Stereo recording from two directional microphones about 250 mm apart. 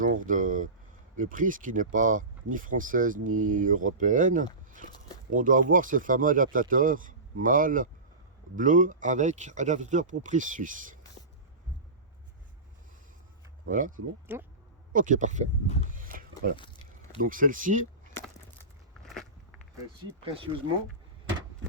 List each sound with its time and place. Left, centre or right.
0.0 s speech: right
13.7 s speech: right
14.3 s speech: centre
14.9 s speech: right
16.1 s a sound: right
17.2 s speech: right
19.0 s walk: centre
20.2 s speech: right